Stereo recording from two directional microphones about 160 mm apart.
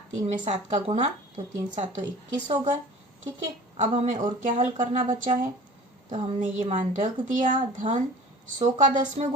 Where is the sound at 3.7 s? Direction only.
40° right (ahead or behind).